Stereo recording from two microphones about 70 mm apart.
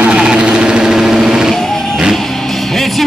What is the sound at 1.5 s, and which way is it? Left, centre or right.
Music, centre.